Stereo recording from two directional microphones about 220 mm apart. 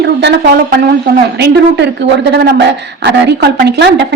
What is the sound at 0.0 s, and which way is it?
A woman's voice, 50° right (ahead or behind).